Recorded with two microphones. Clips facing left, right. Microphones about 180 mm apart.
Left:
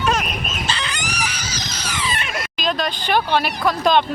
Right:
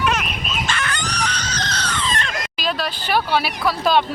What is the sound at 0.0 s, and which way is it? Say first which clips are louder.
Chicken: left 1 dB; 35° left (ahead or behind).